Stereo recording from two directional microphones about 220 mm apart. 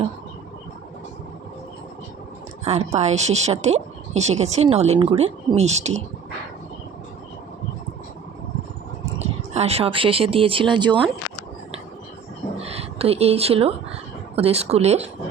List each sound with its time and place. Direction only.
2.6 s a woman's voice: 30° right (ahead or behind)
9.2 s speech: 30° right (ahead or behind)
12.5 s a sound: 25° right (ahead or behind)
14.3 s a woman's voice: 30° right (ahead or behind)